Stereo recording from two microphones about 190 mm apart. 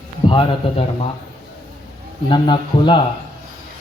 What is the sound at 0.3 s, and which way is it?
Speech, 30° left (ahead or behind).